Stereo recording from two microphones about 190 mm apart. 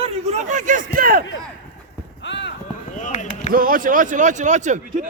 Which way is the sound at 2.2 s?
70° left (ahead or behind).